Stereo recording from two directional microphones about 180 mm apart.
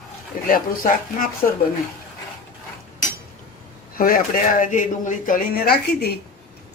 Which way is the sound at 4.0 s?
50° left (ahead or behind).